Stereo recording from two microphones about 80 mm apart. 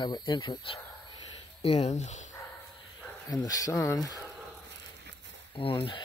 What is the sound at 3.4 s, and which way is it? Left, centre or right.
Speech, left.